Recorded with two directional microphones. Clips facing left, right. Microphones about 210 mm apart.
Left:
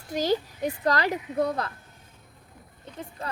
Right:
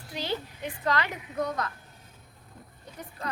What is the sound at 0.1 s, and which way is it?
Speech, 40° left (ahead or behind).